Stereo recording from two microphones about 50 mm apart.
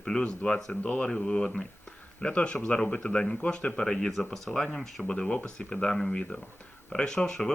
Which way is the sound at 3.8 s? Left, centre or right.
Centre.